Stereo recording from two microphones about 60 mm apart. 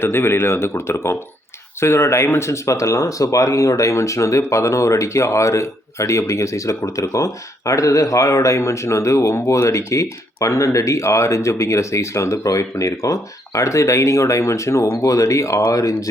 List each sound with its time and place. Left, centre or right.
0.0 s speech: left
12.4 s speech: left